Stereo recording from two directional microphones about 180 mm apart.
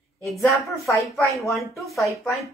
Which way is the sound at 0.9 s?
15° left (ahead or behind).